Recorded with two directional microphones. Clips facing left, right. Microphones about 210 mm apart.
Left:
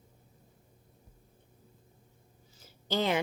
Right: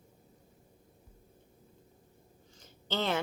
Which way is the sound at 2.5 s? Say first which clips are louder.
Left 3 dB; 10° left (ahead or behind).